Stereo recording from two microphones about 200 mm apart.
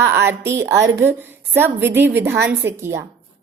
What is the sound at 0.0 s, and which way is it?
A woman's voice, 10° right (ahead or behind).